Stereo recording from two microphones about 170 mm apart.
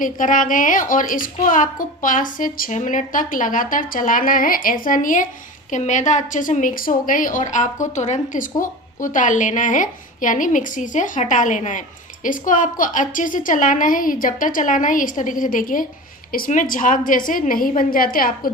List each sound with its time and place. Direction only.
0.0 s a woman's voice: 50° left (ahead or behind)